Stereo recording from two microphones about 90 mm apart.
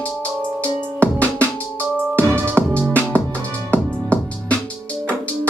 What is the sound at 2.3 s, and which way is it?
Music, 25° right (ahead or behind).